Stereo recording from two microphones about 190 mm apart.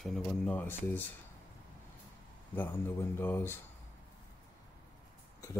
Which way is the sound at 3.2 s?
10° left (ahead or behind).